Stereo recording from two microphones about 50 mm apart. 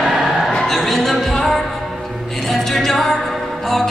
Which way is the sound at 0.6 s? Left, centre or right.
Centre.